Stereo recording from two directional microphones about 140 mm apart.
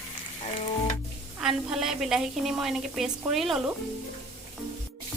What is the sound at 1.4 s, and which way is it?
A woman's voice, 5° right (ahead or behind).